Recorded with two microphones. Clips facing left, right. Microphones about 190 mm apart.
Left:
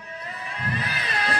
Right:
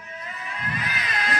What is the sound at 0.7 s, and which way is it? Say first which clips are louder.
Cat: left 1 dB; 35° left (ahead or behind).